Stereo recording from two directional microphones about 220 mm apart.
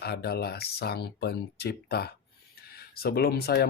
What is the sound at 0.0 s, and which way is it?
Speech, 45° left (ahead or behind).